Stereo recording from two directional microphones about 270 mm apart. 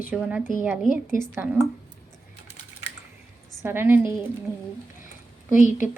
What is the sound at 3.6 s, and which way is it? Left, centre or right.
Speech, centre.